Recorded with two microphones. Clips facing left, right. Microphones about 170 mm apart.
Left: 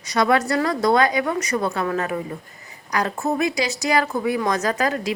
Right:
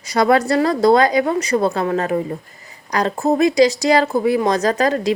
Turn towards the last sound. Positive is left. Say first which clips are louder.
# right 5 dB
turn(degrees=-35)  # may be behind; listen again after turning